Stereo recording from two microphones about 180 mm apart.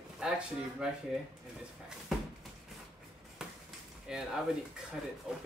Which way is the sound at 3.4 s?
5° right (ahead or behind).